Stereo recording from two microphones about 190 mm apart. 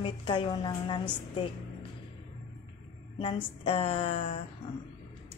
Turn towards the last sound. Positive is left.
turn(degrees=30)  # may be behind; listen again after turning